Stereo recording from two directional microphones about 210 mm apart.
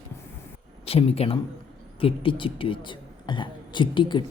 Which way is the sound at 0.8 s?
30° left (ahead or behind).